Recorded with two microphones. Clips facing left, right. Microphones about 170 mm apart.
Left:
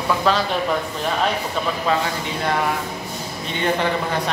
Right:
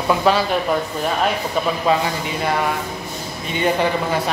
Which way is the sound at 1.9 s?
15° right (ahead or behind).